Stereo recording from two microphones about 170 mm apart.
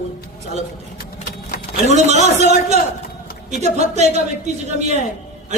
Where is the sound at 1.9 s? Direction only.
40° right (ahead or behind).